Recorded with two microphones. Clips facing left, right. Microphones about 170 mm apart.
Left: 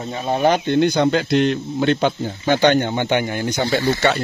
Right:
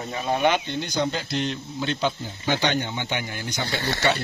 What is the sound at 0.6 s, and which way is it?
Speech, 60° left (ahead or behind).